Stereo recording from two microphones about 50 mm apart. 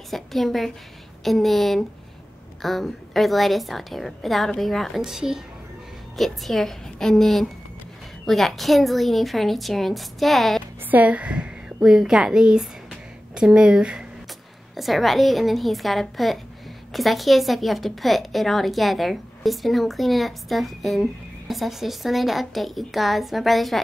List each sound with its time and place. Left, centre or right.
0.1 s a woman's voice: centre
5.0 s a woman's voice: centre
6.1 s a woman's voice: centre
10.9 s a woman's voice: right
11.8 s a woman's voice: centre
14.8 s a woman's voice: centre